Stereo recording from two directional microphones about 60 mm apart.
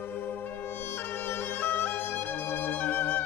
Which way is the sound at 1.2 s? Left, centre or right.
Left.